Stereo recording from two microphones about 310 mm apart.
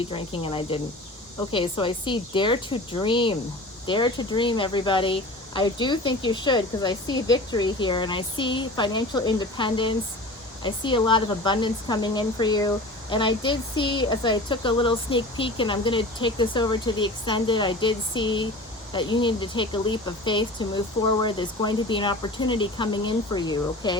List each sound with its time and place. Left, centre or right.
0.0 s speech: centre